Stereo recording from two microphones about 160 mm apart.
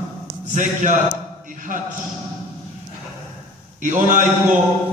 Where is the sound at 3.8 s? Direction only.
55° right (ahead or behind).